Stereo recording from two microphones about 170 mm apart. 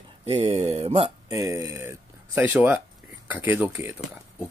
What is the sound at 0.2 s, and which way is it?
Speech, 35° right (ahead or behind).